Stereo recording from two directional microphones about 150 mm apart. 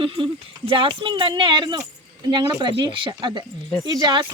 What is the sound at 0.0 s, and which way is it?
Speech, 35° right (ahead or behind).